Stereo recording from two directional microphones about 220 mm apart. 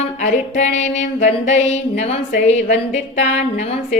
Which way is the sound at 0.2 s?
35° left (ahead or behind).